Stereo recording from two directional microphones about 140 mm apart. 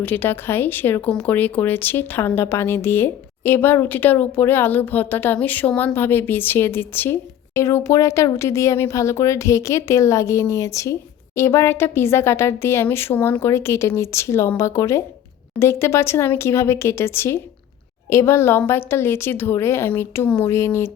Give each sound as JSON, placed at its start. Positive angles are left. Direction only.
{"t": 0.0, "sound": "speech", "side_deg": 15}